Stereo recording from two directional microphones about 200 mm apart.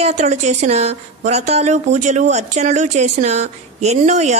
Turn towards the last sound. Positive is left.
turn(degrees=-35)  # may be behind; listen again after turning